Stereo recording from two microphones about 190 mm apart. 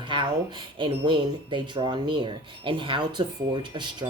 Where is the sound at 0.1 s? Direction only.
25° right (ahead or behind).